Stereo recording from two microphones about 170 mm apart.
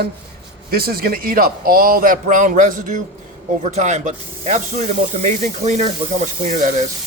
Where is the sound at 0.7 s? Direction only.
60° right (ahead or behind); by 6.7 s 45° right (ahead or behind).